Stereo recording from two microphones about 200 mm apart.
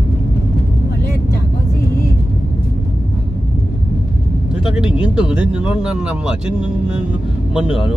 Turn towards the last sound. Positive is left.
turn(degrees=-5)  # may be behind; listen again after turning